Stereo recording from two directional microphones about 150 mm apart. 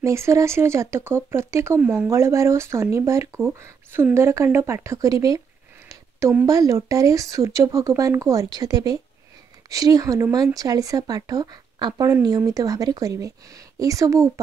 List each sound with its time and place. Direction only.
0.0 s speech: 20° right (ahead or behind)
5.9 s a sound: 20° right (ahead or behind)
6.4 s speech: 20° right (ahead or behind)